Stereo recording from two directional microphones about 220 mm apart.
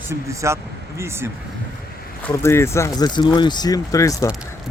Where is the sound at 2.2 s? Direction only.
10° left (ahead or behind).